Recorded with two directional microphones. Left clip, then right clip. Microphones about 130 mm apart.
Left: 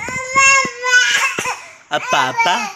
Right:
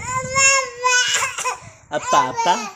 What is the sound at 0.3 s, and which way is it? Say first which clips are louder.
Baby cry: left 5 dB; 40° right (ahead or behind).